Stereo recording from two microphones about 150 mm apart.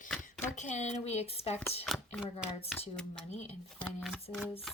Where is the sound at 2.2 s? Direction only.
40° left (ahead or behind).